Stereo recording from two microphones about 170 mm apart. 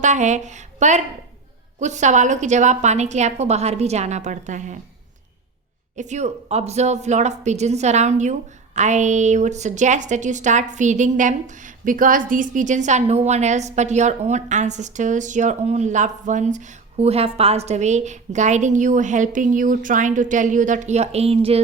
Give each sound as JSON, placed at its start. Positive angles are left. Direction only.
{"t": 0.0, "sound": "a woman's voice", "side_deg": -45}
{"t": 6.0, "sound": "a woman's voice", "side_deg": -45}